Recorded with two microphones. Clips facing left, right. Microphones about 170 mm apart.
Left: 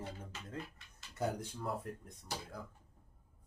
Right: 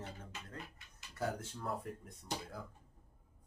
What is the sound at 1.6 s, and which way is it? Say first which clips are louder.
Speech: even; centre (ahead or behind).